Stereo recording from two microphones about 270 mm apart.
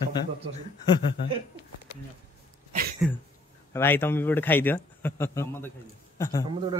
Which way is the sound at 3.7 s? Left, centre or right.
Centre.